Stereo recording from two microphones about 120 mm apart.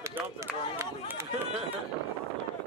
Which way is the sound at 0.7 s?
20° right (ahead or behind).